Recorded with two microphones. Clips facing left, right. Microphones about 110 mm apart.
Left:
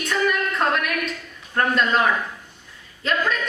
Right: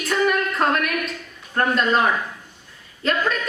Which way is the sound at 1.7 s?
Centre (ahead or behind).